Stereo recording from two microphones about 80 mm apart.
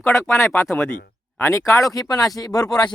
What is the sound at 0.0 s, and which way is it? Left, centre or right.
Speech, left.